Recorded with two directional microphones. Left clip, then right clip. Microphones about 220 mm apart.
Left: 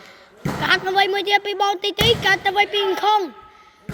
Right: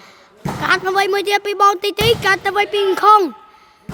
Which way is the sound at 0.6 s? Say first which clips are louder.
Right 2 dB; 20° right (ahead or behind).